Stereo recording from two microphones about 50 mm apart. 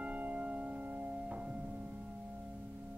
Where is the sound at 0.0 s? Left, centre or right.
Right.